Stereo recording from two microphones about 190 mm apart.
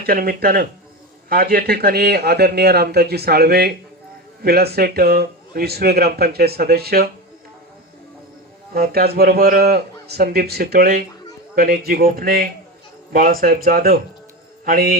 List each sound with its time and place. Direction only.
0.0 s a man's voice: 55° right (ahead or behind)
8.7 s a man's voice: 55° right (ahead or behind)